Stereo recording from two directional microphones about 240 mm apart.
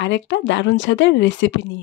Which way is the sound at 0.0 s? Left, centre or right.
Left.